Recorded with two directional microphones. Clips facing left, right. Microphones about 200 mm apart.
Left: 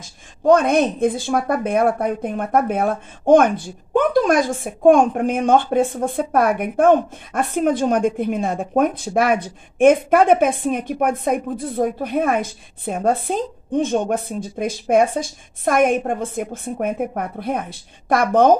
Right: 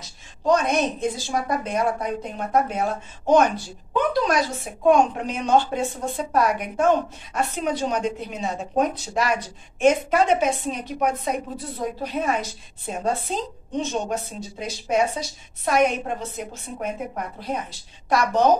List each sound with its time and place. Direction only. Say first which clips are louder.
0.0 s a woman's voice: left 6 dB; 55° left (ahead or behind)